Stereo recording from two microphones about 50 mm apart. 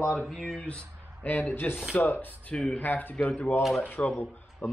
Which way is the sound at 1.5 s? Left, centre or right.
Left.